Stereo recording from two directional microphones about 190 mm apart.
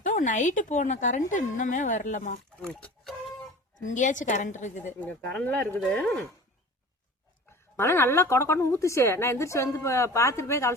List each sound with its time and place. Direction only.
0.0 s a woman's voice: 45° left (ahead or behind)
2.6 s speech: 5° left (ahead or behind)
3.8 s a woman's voice: 40° left (ahead or behind)
4.9 s a woman's voice: 10° left (ahead or behind)
7.8 s a woman's voice: 15° left (ahead or behind)